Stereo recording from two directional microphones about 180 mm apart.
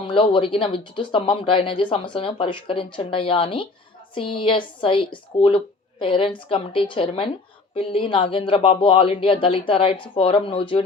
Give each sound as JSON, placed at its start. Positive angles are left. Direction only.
{"t": 0.0, "sound": "speech", "side_deg": 30}